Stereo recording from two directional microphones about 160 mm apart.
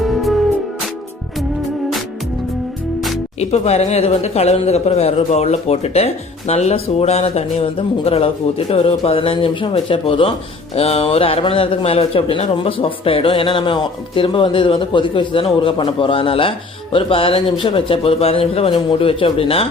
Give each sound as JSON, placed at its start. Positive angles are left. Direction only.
{"t": 0.0, "sound": "music", "side_deg": 0}
{"t": 3.5, "sound": "a man's voice", "side_deg": 40}